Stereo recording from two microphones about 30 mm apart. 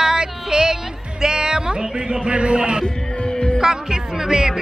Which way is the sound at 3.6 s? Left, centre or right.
Centre.